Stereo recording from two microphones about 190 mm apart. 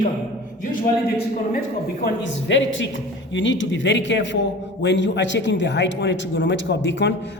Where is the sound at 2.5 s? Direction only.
80° left.